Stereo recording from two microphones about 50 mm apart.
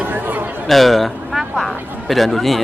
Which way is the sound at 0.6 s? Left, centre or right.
Centre.